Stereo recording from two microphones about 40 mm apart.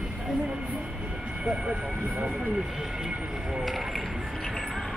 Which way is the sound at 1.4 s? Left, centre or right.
Right.